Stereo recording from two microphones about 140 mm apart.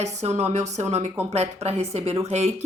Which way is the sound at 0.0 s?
50° right (ahead or behind).